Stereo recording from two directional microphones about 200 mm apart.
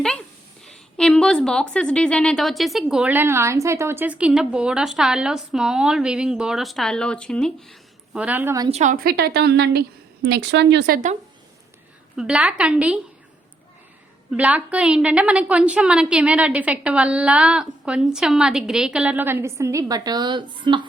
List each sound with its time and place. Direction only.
0.6 s a woman's voice: 5° left (ahead or behind); by 8.7 s 15° right (ahead or behind)
8.7 s a woman's voice: 40° right (ahead or behind)
12.1 s a woman's voice: 5° right (ahead or behind)
14.3 s a woman's voice: 5° right (ahead or behind); by 20.8 s 25° right (ahead or behind)